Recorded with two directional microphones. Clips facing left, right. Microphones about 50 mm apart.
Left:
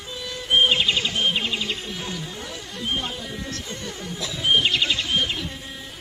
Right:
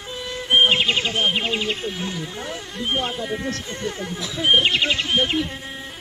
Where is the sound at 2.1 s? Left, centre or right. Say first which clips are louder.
Right 3 dB; right.